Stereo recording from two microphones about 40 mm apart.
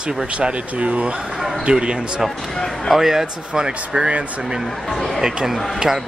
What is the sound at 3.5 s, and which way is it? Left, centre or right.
Speech, centre.